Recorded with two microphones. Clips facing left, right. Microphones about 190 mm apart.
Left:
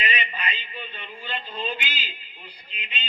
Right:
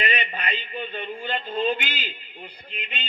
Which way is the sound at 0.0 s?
50° right (ahead or behind).